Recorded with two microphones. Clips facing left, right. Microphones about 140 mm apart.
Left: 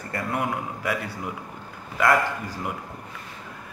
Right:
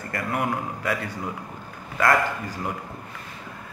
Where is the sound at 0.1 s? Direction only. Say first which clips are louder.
Right 1 dB; 20° left (ahead or behind).